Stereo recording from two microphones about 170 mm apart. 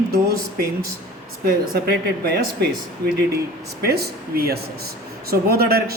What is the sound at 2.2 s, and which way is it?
Speech, 70° right (ahead or behind).